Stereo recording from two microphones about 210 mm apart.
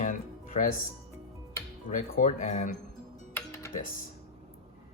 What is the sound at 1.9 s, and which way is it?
Speech, 40° left (ahead or behind).